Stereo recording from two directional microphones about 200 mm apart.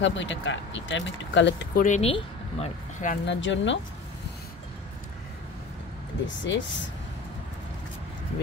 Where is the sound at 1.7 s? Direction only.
40° left (ahead or behind).